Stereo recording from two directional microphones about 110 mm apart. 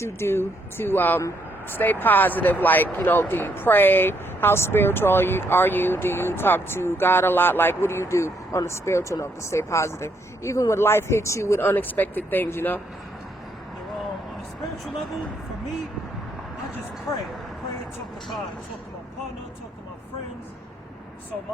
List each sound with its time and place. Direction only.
0.0 s speech: 25° left (ahead or behind)